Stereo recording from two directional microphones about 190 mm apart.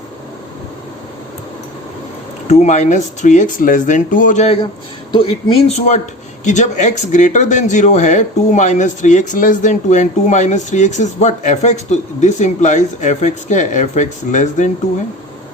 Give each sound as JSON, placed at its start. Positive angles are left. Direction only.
{"t": 2.5, "sound": "speech", "side_deg": 35}
{"t": 5.1, "sound": "speech", "side_deg": 30}